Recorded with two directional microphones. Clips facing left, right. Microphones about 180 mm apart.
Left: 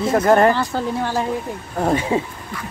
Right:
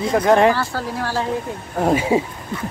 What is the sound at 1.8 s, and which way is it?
Speech, 5° right (ahead or behind).